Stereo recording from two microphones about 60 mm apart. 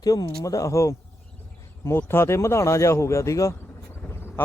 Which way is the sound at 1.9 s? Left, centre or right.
Left.